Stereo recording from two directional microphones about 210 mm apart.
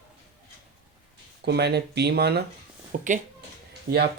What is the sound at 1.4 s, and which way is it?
Speech, 50° right (ahead or behind).